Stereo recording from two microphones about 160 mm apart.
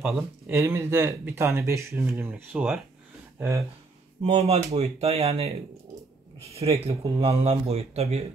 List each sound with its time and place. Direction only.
0.0 s speech: 10° right (ahead or behind)
3.3 s speech: 20° right (ahead or behind)
4.2 s speech: 45° right (ahead or behind)